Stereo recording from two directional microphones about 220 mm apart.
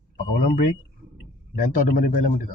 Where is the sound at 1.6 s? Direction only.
40° left (ahead or behind).